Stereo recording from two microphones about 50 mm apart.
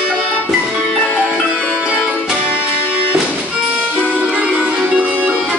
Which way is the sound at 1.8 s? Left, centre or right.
Right.